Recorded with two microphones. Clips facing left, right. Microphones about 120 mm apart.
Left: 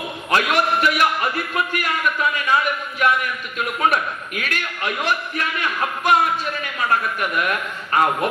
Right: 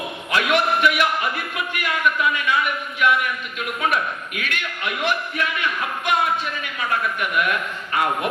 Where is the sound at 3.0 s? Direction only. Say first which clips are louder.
Even; 40° left (ahead or behind).